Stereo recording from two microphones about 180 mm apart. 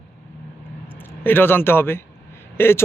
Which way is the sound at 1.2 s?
10° left (ahead or behind).